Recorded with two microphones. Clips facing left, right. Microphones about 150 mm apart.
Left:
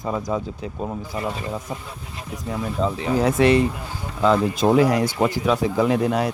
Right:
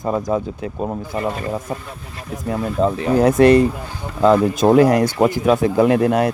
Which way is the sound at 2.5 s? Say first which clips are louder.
Right 5 dB; 55° right (ahead or behind).